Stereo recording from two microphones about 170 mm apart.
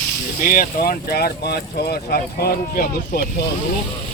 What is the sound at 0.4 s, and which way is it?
Speech, 55° left (ahead or behind).